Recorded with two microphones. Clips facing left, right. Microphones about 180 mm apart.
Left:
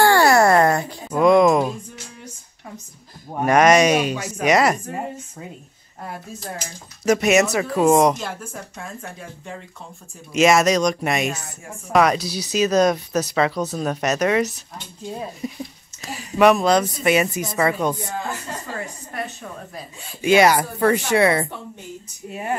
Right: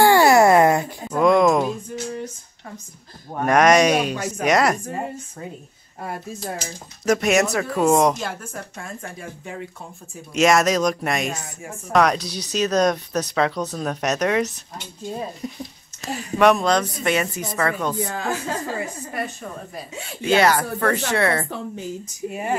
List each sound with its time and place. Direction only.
0.0 s a sound: 15° right (ahead or behind)
1.1 s music: 5° left (ahead or behind)
3.3 s speech: centre (ahead or behind)
7.1 s speech: centre (ahead or behind)
18.0 s speech: 90° right
18.8 s speech: centre (ahead or behind)
20.2 s speech: 15° left (ahead or behind)
22.3 s speech: centre (ahead or behind)